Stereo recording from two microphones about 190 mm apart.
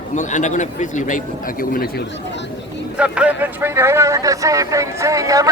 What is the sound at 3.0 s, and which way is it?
Speech, 5° right (ahead or behind).